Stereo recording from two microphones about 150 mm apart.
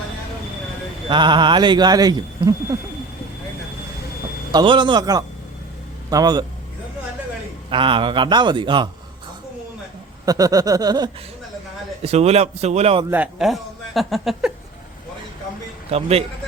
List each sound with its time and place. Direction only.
1.0 s speech: 30° right (ahead or behind)
4.5 s a sound: 30° right (ahead or behind)
7.7 s speech: 35° right (ahead or behind)
10.2 s a sound: 25° right (ahead or behind)
12.0 s a man's voice: 45° right (ahead or behind)
13.1 s a man's voice: 10° right (ahead or behind)
15.9 s a man's voice: 45° right (ahead or behind)